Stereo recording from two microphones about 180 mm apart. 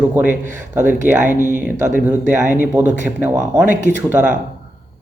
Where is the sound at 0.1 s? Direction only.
10° right (ahead or behind).